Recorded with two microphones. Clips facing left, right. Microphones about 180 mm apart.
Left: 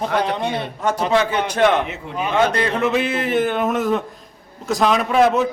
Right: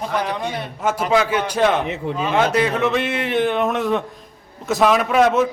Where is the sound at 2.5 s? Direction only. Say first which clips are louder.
Right 1 dB; centre (ahead or behind).